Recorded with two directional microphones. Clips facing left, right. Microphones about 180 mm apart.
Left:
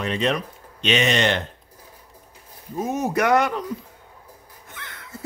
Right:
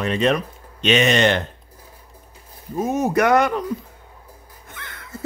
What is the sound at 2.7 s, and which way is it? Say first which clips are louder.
Speech: right 4 dB; 50° right (ahead or behind).